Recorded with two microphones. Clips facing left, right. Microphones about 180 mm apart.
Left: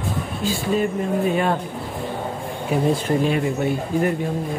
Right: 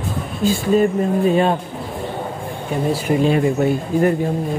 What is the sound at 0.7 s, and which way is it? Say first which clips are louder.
Speech: right 6 dB; 40° right (ahead or behind).